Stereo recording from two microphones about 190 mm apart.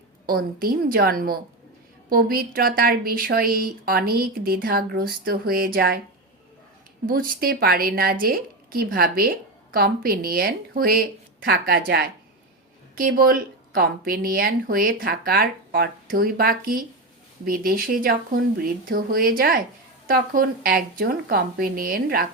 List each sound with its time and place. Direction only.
0.3 s a woman's voice: 50° right (ahead or behind)
7.1 s a woman's voice: 50° right (ahead or behind)